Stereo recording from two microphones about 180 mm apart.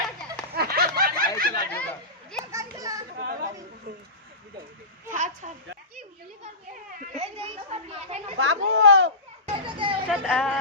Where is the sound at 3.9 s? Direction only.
55° right (ahead or behind).